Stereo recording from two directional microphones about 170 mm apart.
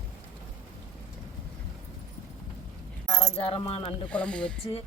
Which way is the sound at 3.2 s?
35° left (ahead or behind).